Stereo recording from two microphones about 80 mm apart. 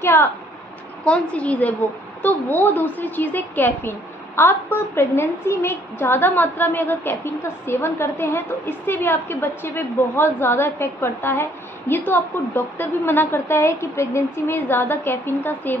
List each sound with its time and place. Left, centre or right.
0.0 s speech: left
1.0 s a woman's voice: centre